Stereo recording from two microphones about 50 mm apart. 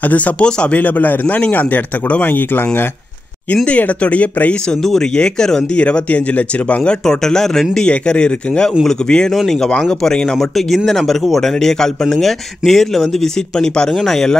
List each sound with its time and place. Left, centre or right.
0.1 s speech: left
0.7 s a man's voice: left
3.6 s speech: left
5.1 s speech: centre
6.9 s speech: centre
9.3 s speech: centre
9.8 s speech: centre